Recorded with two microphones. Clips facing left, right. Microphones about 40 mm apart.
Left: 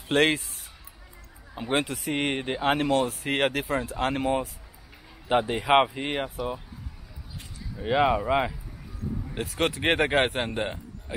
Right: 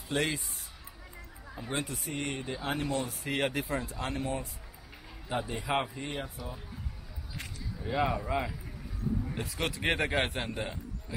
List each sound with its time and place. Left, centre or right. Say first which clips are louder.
0.1 s speech: left 9 dB; left
1.5 s speech: left 9 dB; left
4.2 s speech: left 8 dB; left
5.3 s speech: left 10 dB; left
7.8 s a man's voice: left 8 dB; left
9.5 s a man's voice: left 7 dB; left